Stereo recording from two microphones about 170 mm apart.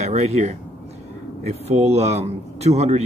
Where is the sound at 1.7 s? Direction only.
40° right (ahead or behind).